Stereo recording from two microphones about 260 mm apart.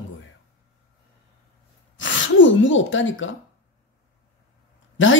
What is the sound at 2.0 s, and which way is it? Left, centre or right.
Gasp, left.